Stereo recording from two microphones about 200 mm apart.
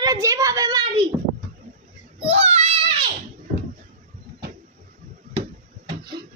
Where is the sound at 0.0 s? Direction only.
15° right (ahead or behind).